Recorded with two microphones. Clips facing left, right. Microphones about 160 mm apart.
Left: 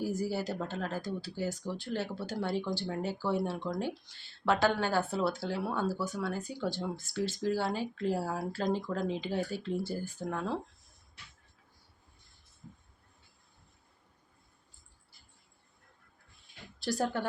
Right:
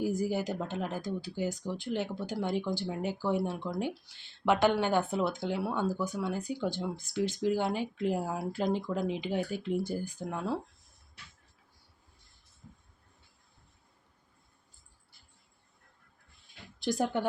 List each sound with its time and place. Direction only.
0.0 s speech: 15° right (ahead or behind)
16.8 s a woman's voice: 20° right (ahead or behind)